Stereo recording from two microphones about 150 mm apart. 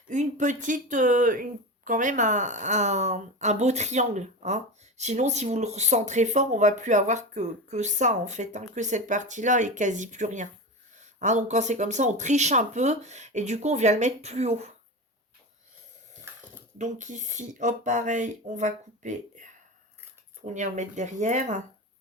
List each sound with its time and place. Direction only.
0.1 s speech: 55° right (ahead or behind)
16.7 s speech: 55° right (ahead or behind)